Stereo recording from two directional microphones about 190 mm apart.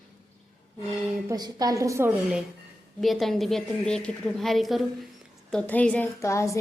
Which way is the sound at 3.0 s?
Centre (ahead or behind).